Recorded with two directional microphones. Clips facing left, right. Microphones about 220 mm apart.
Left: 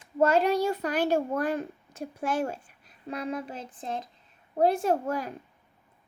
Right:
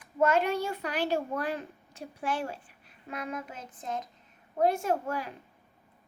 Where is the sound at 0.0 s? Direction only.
35° left (ahead or behind).